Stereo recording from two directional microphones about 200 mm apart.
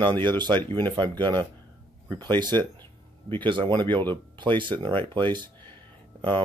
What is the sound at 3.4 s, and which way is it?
Speech, 25° right (ahead or behind).